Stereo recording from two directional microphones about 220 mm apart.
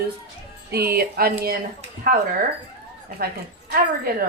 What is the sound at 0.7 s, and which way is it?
Speech, 45° right (ahead or behind).